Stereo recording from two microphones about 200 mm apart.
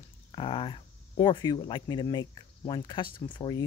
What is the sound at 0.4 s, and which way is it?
Speech, 25° left (ahead or behind).